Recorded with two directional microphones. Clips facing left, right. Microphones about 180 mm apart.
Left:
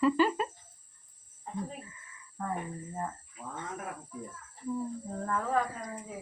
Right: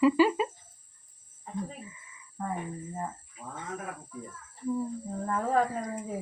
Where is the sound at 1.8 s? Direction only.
15° right (ahead or behind).